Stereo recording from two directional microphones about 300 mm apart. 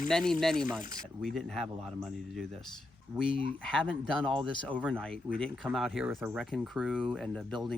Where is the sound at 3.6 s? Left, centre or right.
Centre.